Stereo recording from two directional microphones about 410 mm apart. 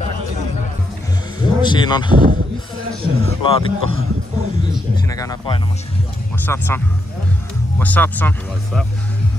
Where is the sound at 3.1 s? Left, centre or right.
Centre.